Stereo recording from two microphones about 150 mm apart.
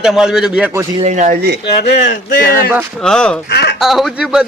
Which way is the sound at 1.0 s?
55° right (ahead or behind).